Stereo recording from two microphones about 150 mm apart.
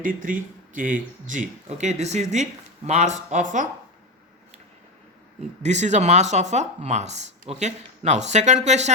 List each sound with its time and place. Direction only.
0.0 s speech: 65° right (ahead or behind)
5.6 s speech: 50° right (ahead or behind)